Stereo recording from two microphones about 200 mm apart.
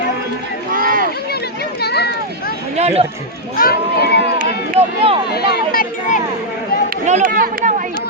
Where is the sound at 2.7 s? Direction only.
30° right (ahead or behind).